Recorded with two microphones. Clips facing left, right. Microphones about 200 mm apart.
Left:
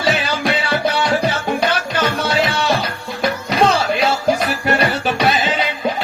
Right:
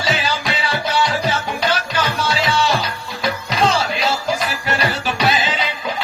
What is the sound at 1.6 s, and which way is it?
Music, 55° left (ahead or behind).